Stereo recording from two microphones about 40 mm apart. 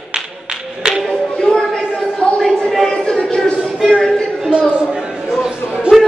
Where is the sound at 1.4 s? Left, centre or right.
Centre.